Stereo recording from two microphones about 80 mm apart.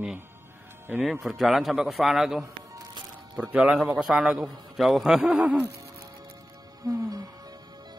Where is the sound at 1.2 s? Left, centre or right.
Centre.